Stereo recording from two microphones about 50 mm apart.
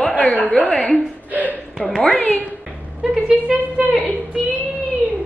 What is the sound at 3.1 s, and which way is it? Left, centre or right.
A woman's voice, centre.